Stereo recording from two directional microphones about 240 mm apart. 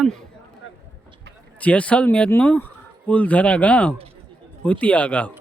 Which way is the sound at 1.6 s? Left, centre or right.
Centre.